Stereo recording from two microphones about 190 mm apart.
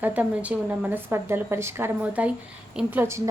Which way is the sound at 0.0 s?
10° right (ahead or behind).